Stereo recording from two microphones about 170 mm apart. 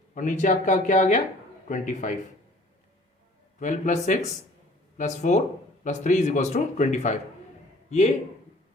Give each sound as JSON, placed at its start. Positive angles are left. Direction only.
{"t": 0.1, "sound": "speech", "side_deg": 50}
{"t": 3.6, "sound": "a man's voice", "side_deg": 45}